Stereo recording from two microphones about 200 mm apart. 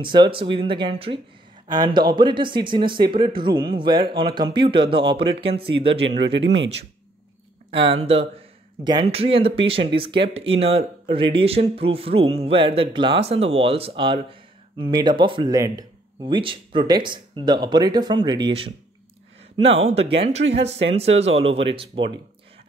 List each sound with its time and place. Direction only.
0.0 s speech: 25° right (ahead or behind)
5.9 s speech: 60° right (ahead or behind)
7.7 s speech: 30° right (ahead or behind)